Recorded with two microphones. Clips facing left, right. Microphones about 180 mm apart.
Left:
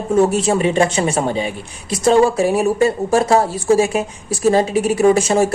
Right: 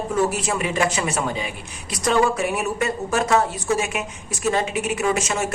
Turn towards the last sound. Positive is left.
turn(degrees=30)  # may be behind; listen again after turning